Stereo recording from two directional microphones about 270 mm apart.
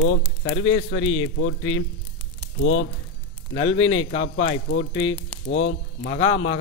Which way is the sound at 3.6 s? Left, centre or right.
Left.